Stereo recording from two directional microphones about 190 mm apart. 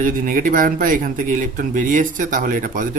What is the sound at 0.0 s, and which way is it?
Speech, 45° right (ahead or behind).